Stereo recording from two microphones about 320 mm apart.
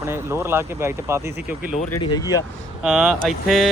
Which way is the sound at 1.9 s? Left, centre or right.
Centre.